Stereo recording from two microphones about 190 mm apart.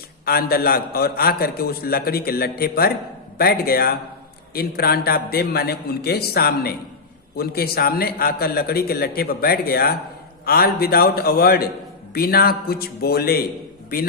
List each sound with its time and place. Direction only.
0.3 s a man's voice: 55° left (ahead or behind)